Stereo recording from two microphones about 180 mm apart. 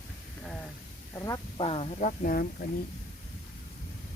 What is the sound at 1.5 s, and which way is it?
Speech, 30° left (ahead or behind).